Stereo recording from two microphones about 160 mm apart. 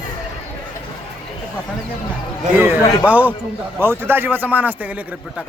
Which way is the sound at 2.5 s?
10° right (ahead or behind).